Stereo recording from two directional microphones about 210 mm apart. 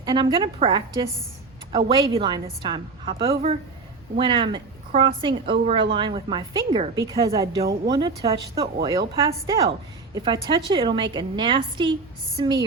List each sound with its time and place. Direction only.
0.0 s a woman's voice: 25° right (ahead or behind)